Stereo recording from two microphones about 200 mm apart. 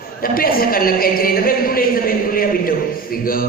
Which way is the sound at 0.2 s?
45° left (ahead or behind).